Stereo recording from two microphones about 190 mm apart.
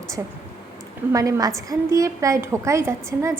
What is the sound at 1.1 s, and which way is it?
A woman's voice, 15° right (ahead or behind).